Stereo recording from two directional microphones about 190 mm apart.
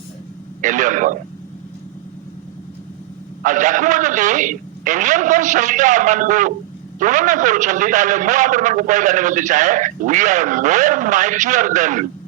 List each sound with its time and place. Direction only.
0.6 s a man's voice: 40° right (ahead or behind)
3.4 s a man's voice: 40° right (ahead or behind)